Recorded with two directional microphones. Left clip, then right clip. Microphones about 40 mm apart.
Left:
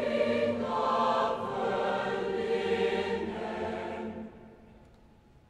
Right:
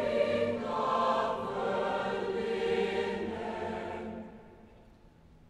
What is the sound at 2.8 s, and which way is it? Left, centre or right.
Music, right.